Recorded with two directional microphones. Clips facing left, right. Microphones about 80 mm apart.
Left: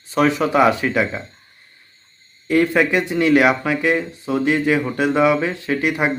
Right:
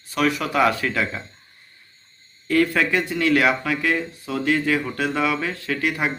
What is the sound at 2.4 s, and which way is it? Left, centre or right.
Speech, left.